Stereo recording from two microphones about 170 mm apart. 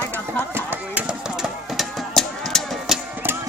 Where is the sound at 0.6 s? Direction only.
10° right (ahead or behind).